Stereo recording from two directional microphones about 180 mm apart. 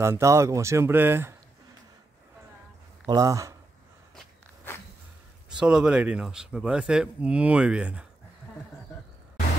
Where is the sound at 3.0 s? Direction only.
20° right (ahead or behind).